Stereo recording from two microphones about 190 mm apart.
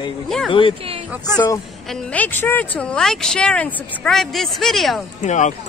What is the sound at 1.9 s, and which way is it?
A woman's voice, 5° left (ahead or behind).